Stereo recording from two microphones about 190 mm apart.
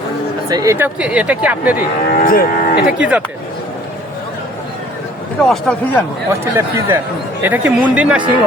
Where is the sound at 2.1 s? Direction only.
50° left (ahead or behind).